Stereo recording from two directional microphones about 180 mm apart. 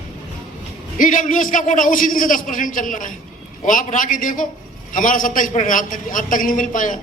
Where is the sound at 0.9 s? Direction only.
50° left (ahead or behind).